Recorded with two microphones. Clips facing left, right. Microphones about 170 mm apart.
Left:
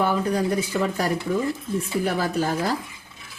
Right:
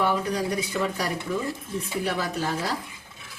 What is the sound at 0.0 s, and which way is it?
Speech, 45° left (ahead or behind).